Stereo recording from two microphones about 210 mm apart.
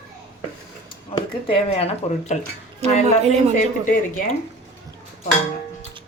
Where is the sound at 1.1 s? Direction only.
25° left (ahead or behind).